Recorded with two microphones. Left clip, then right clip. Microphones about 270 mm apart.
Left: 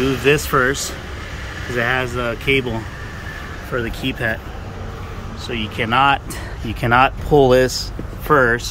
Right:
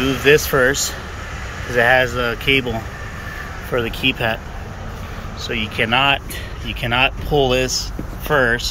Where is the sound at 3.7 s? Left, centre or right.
Centre.